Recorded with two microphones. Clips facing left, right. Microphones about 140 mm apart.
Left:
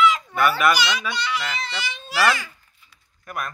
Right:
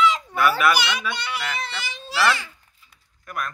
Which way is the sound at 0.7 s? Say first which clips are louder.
Left 1 dB; 60° right (ahead or behind).